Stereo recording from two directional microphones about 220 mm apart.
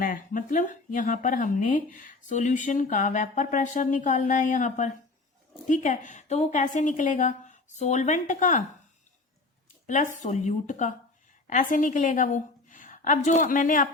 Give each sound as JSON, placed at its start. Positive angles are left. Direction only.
{"t": 0.0, "sound": "speech", "side_deg": 40}
{"t": 9.8, "sound": "a woman's voice", "side_deg": 35}